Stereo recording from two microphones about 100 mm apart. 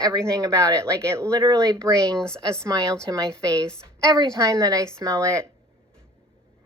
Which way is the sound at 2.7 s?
45° right (ahead or behind).